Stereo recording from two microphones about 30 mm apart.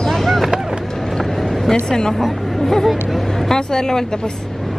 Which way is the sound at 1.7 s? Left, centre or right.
Left.